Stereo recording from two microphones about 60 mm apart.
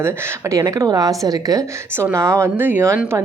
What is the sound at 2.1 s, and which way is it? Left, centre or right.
Speech, right.